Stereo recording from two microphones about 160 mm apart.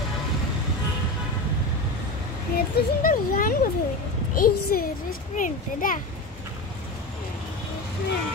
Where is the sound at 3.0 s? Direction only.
60° left (ahead or behind).